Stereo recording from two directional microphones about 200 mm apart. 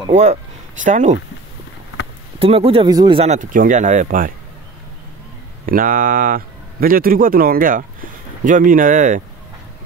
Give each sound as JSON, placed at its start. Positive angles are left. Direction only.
{"t": 0.1, "sound": "speech", "side_deg": -35}
{"t": 2.3, "sound": "speech", "side_deg": -30}
{"t": 5.7, "sound": "speech", "side_deg": -45}